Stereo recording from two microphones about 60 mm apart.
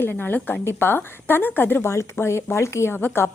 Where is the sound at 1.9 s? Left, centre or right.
Left.